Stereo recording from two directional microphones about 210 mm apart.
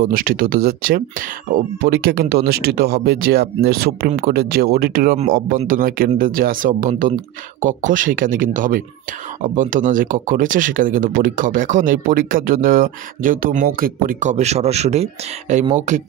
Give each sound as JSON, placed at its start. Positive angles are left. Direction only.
{"t": 0.1, "sound": "speech", "side_deg": -45}